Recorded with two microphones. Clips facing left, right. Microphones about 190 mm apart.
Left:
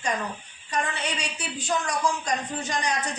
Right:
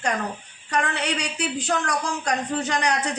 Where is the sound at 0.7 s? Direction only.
70° right (ahead or behind).